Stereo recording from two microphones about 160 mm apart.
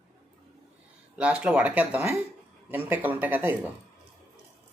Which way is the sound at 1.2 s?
10° right (ahead or behind).